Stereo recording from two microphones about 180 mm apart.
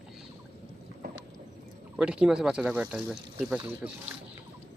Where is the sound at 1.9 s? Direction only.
5° right (ahead or behind).